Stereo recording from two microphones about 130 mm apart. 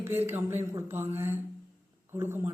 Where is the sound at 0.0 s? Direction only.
15° right (ahead or behind).